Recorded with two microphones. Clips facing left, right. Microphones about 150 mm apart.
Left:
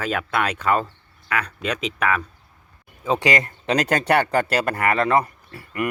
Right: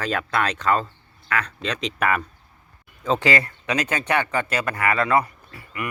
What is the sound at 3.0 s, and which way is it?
Speech, 15° left (ahead or behind).